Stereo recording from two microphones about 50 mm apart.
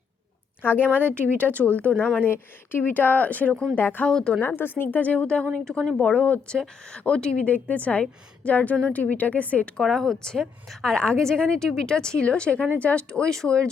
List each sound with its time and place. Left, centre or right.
0.6 s a woman's voice: left
0.9 s speech: right
1.5 s speech: left
2.3 s speech: left
4.0 s speech: centre
4.4 s speech: left
5.5 s speech: centre
6.1 s speech: left
6.5 s speech: centre
7.4 s speech: left
9.8 s a woman's voice: centre
10.9 s speech: centre